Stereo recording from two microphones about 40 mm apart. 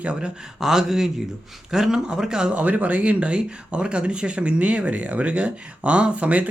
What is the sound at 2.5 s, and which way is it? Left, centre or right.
Speech, right.